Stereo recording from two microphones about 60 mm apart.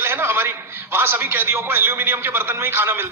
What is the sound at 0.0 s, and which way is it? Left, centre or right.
A man's voice, right.